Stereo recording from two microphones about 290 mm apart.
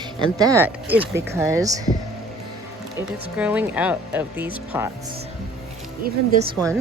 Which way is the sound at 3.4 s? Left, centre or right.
Centre.